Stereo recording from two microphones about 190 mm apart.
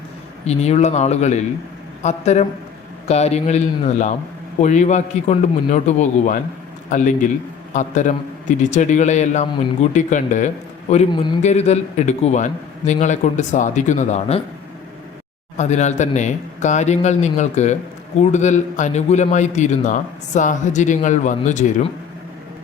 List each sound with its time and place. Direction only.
0.4 s a man's voice: 35° left (ahead or behind)
11.1 s a man's voice: 25° left (ahead or behind)
11.4 s a man's voice: 35° left (ahead or behind)
15.5 s a man's voice: 40° left (ahead or behind)